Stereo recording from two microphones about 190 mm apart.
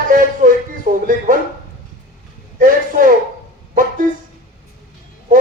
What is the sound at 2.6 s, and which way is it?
Speech, 45° right (ahead or behind).